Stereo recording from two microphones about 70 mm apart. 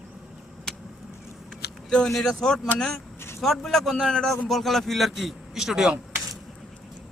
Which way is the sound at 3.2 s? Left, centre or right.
Left.